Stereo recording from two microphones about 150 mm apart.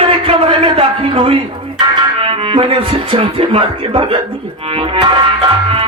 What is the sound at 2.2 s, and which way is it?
Music, 35° right (ahead or behind).